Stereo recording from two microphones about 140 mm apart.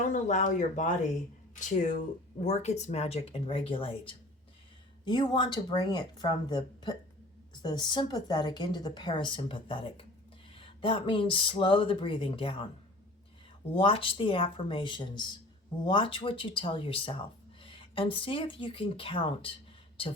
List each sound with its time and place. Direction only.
0.0 s speech: 60° left (ahead or behind); by 12.6 s 40° left (ahead or behind)
13.7 s speech: 40° left (ahead or behind)